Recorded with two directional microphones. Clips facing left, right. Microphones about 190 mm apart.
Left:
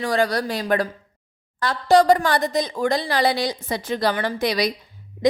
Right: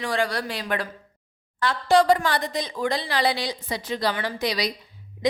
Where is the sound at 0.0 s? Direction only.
40° left (ahead or behind).